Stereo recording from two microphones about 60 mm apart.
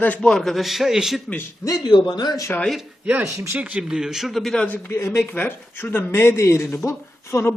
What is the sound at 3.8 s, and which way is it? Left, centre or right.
Speech, centre.